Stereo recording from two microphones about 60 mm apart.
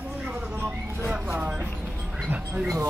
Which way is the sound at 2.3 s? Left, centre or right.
Right.